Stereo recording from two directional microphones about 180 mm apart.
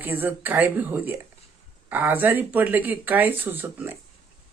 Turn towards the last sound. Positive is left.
turn(degrees=-10)  # may be behind; listen again after turning